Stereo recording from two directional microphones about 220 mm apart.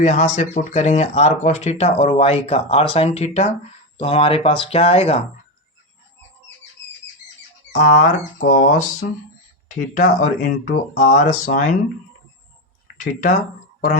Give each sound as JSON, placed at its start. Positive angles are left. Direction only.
{"t": 0.0, "sound": "speech", "side_deg": 30}
{"t": 7.7, "sound": "speech", "side_deg": 35}
{"t": 9.6, "sound": "speech", "side_deg": 35}
{"t": 13.0, "sound": "speech", "side_deg": 35}